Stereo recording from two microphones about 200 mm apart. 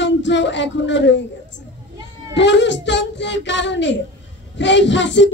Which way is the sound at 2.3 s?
65° left (ahead or behind).